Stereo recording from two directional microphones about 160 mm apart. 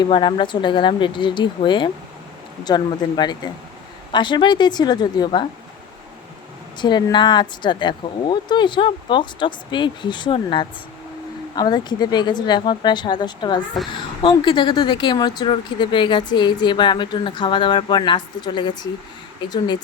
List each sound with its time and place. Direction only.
0.0 s speech: 30° left (ahead or behind)
6.7 s speech: 30° left (ahead or behind)